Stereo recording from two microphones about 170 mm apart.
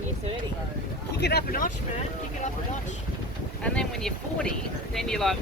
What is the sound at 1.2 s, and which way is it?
Speech, 70° left (ahead or behind).